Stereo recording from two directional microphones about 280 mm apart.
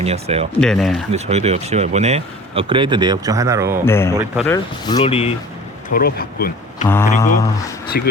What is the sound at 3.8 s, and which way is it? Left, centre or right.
A man's voice, centre.